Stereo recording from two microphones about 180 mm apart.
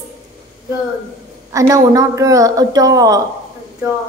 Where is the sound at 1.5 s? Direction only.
20° right (ahead or behind).